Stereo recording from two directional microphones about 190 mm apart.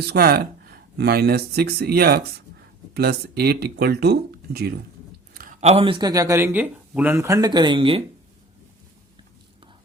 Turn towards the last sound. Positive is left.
turn(degrees=-30)  # may be behind; listen again after turning